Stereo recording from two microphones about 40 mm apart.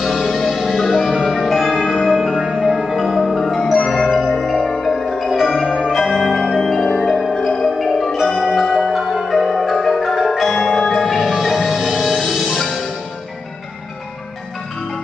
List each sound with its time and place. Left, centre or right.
0.0 s music: centre
1.1 s tubular bells: centre
2.0 s music: centre
2.3 s music: centre
3.0 s music: centre
3.9 s marimba: centre
5.3 s music: centre
5.9 s marimba: centre
7.0 s music: centre
7.8 s marimba: centre
8.5 s music: centre
8.9 s marimba: centre
10.5 s music: centre
11.0 s music: centre